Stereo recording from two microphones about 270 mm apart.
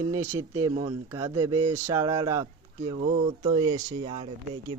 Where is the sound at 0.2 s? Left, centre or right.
Centre.